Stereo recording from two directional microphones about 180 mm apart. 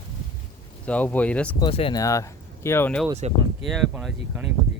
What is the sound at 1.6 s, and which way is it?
Speech, 30° left (ahead or behind).